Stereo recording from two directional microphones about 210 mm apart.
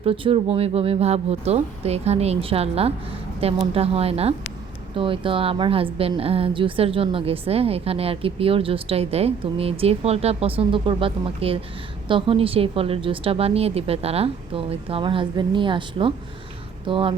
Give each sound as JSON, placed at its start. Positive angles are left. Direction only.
{"t": 0.0, "sound": "a woman's voice", "side_deg": -25}